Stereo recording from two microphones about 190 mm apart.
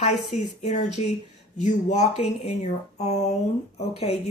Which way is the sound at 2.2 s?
35° left (ahead or behind).